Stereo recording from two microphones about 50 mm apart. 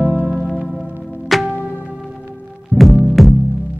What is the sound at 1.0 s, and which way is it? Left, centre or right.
Music, centre.